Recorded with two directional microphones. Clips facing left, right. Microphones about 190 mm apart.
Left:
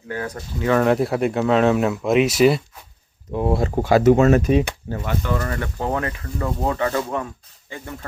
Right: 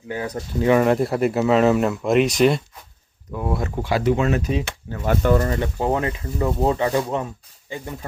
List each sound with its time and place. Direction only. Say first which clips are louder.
0.1 s speech: right 2 dB; 20° right (ahead or behind)
0.8 s speech: even; centre (ahead or behind)
3.3 s speech: left 5 dB; 25° left (ahead or behind)
3.8 s speech: left 7 dB; 45° left (ahead or behind)
5.0 s speech: right 7 dB; 45° right (ahead or behind)
5.4 s speech: right 3 dB; 20° right (ahead or behind)